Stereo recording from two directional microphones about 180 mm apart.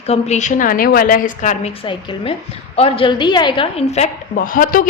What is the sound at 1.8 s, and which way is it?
A woman's voice, 30° left (ahead or behind).